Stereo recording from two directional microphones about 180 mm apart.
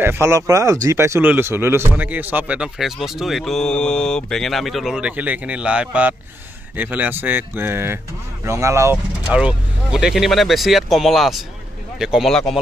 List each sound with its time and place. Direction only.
0.0 s speech: 15° right (ahead or behind); by 12.5 s centre (ahead or behind)